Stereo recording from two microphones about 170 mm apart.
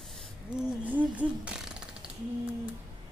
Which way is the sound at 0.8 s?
10° right (ahead or behind).